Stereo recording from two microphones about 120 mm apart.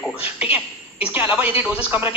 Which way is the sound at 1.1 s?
15° right (ahead or behind).